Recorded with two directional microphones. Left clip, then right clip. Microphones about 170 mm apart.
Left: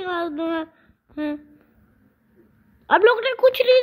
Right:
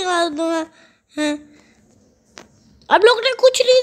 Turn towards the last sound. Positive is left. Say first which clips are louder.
# right 3 dB
turn(degrees=-5)  # may be behind; listen again after turning